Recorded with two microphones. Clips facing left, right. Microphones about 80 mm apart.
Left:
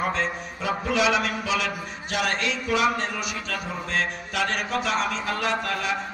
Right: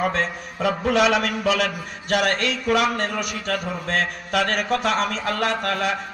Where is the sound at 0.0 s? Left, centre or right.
Right.